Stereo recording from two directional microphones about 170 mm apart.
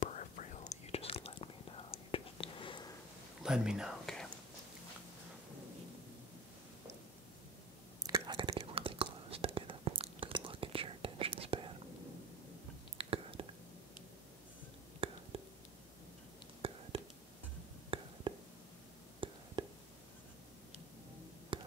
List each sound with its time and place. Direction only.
0.0 s whispering: 45° left (ahead or behind); by 2.9 s 30° left (ahead or behind)
3.4 s speech: 5° right (ahead or behind)
8.0 s whispering: 25° right (ahead or behind)
12.9 s whispering: 35° right (ahead or behind)
15.0 s whispering: 35° right (ahead or behind)
16.6 s whispering: 35° right (ahead or behind)
17.8 s a sound: 30° right (ahead or behind)
21.5 s a sound: 30° right (ahead or behind)